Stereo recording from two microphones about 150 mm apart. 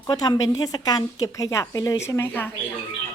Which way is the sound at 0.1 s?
25° left (ahead or behind).